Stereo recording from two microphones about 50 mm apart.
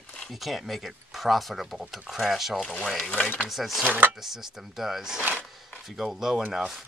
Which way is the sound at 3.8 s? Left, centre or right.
Right.